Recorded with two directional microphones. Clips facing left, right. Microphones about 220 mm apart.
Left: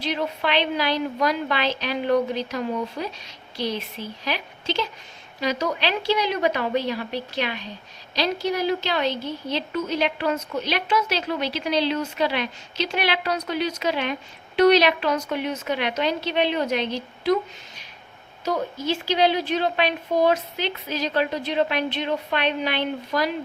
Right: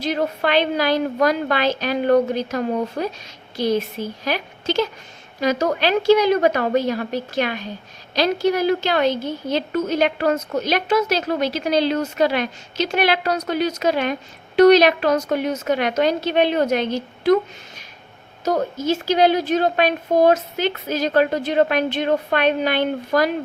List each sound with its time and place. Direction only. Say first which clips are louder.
0.0 s a woman's voice: right 4 dB; 45° right (ahead or behind)
18.4 s a woman's voice: right 5 dB; 45° right (ahead or behind)